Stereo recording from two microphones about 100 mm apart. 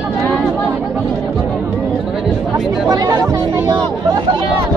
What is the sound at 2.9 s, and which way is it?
Speech, 35° right (ahead or behind).